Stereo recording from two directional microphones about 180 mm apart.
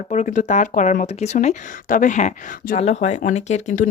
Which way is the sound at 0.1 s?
45° left (ahead or behind).